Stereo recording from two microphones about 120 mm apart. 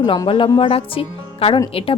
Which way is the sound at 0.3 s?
45° left (ahead or behind).